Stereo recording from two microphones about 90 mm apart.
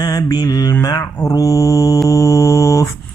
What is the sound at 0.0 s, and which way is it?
Mantra, 45° left (ahead or behind).